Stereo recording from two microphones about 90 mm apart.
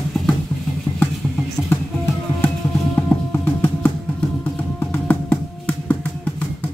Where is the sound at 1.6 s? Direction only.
20° left (ahead or behind).